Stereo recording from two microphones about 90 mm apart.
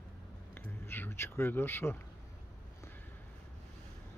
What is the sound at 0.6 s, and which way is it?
Speech, 25° left (ahead or behind).